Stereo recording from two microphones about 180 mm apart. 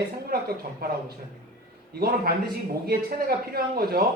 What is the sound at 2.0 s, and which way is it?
A man's voice, 60° right (ahead or behind).